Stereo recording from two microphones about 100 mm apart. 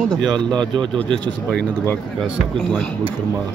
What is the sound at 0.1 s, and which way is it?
Speech, 10° left (ahead or behind).